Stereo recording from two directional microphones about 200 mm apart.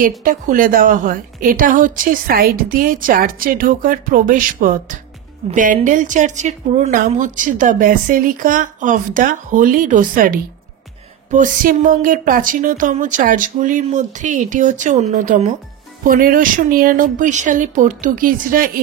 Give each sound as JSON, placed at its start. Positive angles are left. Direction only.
{"t": 0.0, "sound": "a woman's voice", "side_deg": -40}